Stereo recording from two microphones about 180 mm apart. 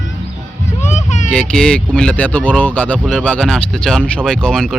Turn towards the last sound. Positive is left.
turn(degrees=5)  # may be behind; listen again after turning